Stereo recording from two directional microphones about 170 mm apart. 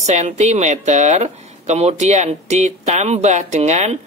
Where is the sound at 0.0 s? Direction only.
40° right (ahead or behind).